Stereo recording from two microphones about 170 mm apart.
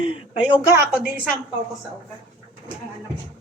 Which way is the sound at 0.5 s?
15° right (ahead or behind).